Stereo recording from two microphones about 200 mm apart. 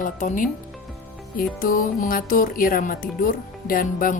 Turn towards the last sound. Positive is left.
turn(degrees=45)  # may be behind; listen again after turning